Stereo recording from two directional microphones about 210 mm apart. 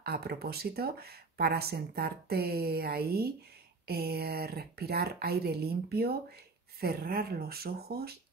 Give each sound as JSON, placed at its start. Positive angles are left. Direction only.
{"t": 0.0, "sound": "speech", "side_deg": -50}